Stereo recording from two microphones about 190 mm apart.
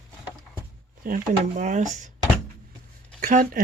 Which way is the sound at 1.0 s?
45° right (ahead or behind).